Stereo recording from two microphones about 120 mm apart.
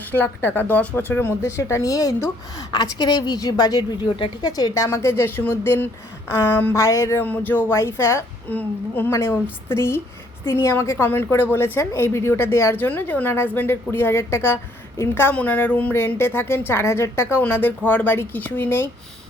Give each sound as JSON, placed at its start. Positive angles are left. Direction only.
{"t": 0.1, "sound": "a woman's voice", "side_deg": 15}